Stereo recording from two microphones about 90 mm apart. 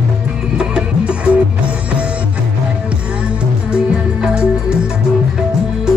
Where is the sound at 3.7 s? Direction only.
10° right (ahead or behind).